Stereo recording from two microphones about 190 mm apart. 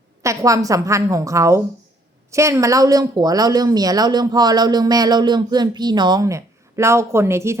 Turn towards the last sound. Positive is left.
turn(degrees=-15)  # may be behind; listen again after turning